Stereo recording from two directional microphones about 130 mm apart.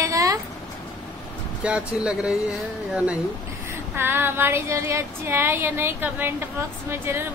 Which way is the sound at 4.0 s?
15° right (ahead or behind).